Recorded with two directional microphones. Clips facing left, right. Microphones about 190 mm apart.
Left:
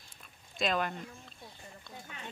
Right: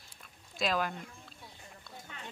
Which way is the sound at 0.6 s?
Centre (ahead or behind).